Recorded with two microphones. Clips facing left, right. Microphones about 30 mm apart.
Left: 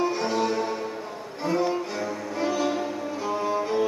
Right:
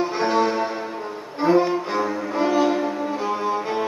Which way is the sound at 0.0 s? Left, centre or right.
Right.